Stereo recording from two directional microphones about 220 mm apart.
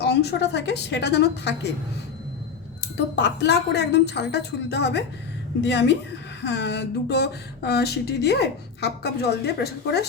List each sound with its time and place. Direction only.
0.0 s speech: 50° left (ahead or behind)
3.2 s speech: 50° left (ahead or behind)